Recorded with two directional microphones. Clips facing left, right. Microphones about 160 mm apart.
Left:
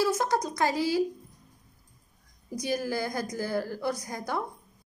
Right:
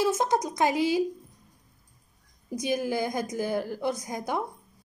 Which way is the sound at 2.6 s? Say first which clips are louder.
Right 2 dB; 20° right (ahead or behind).